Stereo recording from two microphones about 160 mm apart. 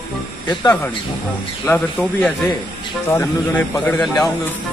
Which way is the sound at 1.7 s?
10° left (ahead or behind).